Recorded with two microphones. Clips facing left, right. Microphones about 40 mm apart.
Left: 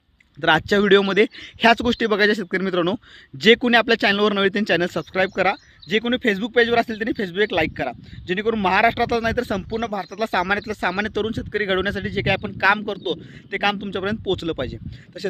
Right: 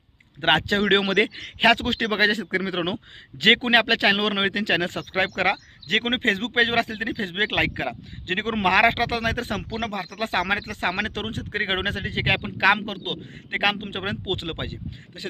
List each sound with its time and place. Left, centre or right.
0.3 s a man's voice: right
5.5 s speech: right
9.8 s speech: right
10.2 s a man's voice: right